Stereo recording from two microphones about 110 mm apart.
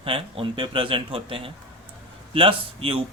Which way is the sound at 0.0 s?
55° right (ahead or behind).